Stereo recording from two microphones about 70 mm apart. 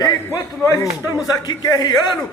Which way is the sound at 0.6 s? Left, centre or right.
Left.